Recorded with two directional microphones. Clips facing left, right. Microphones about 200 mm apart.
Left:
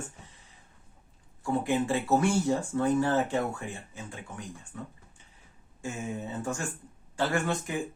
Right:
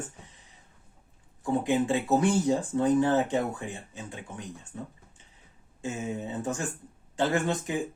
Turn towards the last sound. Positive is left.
turn(degrees=-20)  # may be behind; listen again after turning